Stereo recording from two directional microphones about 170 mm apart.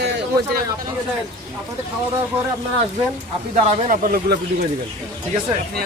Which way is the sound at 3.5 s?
50° right (ahead or behind).